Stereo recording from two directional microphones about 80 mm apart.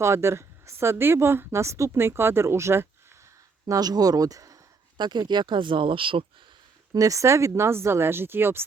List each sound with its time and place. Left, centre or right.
0.0 s a woman's voice: right
3.7 s speech: right
4.9 s speech: right
6.9 s a woman's voice: right